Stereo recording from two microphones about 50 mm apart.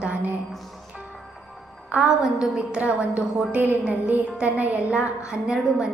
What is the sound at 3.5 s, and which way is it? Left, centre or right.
Speech, right.